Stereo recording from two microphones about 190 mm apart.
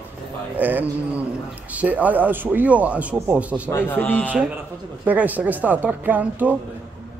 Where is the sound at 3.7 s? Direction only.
10° left (ahead or behind).